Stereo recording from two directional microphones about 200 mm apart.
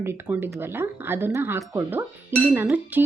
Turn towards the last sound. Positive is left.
turn(degrees=-10)  # may be behind; listen again after turning